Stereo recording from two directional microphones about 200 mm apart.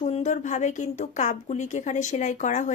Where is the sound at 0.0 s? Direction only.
35° left (ahead or behind).